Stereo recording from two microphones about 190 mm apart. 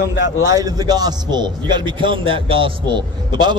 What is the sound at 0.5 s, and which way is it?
A man's voice, 20° right (ahead or behind).